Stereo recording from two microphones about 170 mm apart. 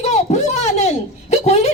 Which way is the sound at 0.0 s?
40° left (ahead or behind).